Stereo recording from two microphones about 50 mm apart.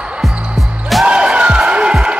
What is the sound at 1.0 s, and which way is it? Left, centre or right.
Music, right.